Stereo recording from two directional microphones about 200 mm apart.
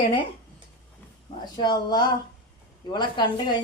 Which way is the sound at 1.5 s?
20° left (ahead or behind).